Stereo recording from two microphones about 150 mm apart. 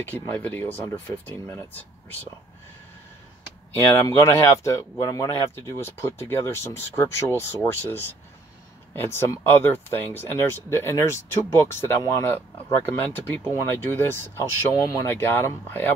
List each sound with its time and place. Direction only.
0.0 s speech: 10° left (ahead or behind)
0.8 s speech: 25° left (ahead or behind)
3.9 s speech: 20° left (ahead or behind)